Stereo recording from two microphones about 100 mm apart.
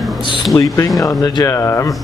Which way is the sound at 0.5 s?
30° left (ahead or behind).